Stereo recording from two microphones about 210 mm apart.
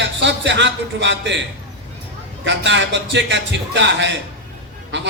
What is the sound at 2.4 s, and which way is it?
A man's voice, 60° right (ahead or behind).